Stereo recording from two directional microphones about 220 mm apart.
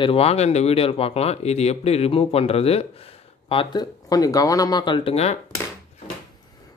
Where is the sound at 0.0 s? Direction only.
25° left (ahead or behind).